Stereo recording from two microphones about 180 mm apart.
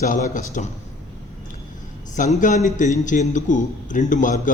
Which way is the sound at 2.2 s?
45° left (ahead or behind).